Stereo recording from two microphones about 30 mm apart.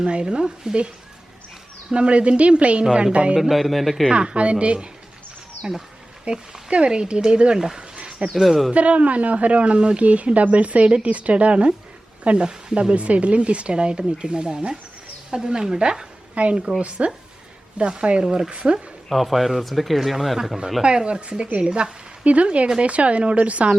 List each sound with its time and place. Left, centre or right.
0.0 s speech: right
1.9 s speech: right
3.5 s speech: centre
4.1 s speech: right
6.3 s speech: right
7.8 s a sound: right
8.4 s speech: centre
8.7 s speech: right
15.8 s a woman's voice: right
18.0 s speech: right
19.1 s speech: centre
20.8 s speech: right
22.2 s speech: right
22.4 s speech: right